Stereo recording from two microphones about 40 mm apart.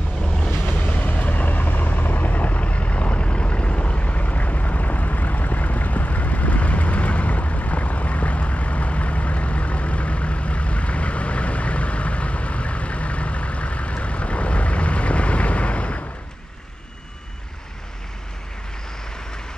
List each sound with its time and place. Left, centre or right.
0.2 s waves: centre
0.7 s vehicle: left